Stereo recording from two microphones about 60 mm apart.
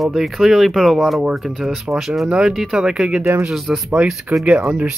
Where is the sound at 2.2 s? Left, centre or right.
Centre.